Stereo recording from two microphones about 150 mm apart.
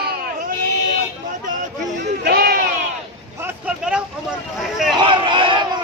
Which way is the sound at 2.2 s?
90° right.